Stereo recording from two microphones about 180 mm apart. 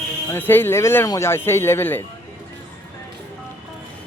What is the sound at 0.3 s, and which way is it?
Speech, 10° left (ahead or behind).